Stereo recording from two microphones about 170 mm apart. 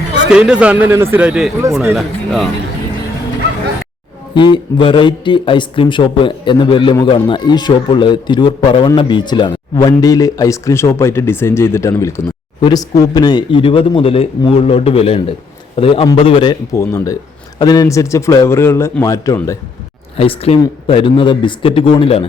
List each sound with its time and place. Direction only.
0.3 s a man's voice: 5° right (ahead or behind)
4.4 s a man's voice: 25° left (ahead or behind)
20.1 s speech: 35° left (ahead or behind)